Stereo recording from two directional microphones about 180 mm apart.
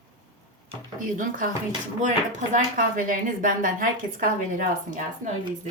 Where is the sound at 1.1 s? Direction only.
50° right (ahead or behind).